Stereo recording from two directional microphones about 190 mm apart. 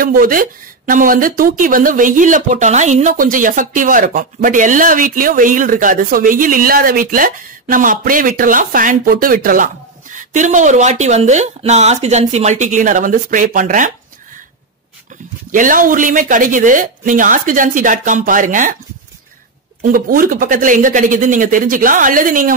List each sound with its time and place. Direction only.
0.0 s a woman's voice: 50° right (ahead or behind)
15.5 s a woman's voice: 45° right (ahead or behind)
19.8 s a woman's voice: 50° right (ahead or behind)